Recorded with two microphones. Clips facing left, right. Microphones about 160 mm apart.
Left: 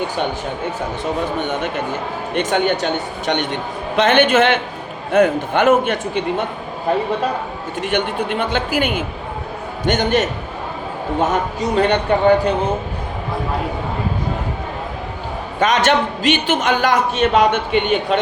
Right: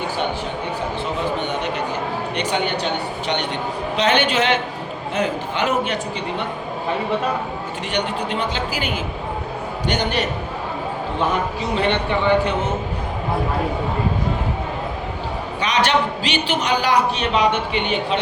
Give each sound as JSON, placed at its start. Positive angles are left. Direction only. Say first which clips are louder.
{"t": 1.5, "sound": "a man's voice", "louder": "left 2 dB", "side_deg": 50}
{"t": 7.8, "sound": "a man's voice", "louder": "left 5 dB", "side_deg": 50}
{"t": 15.6, "sound": "a man's voice", "louder": "left 4 dB", "side_deg": 50}